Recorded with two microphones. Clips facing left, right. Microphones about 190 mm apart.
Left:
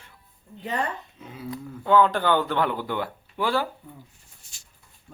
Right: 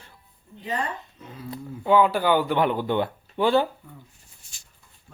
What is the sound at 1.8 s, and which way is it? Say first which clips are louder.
Speech: right 1 dB; 10° right (ahead or behind).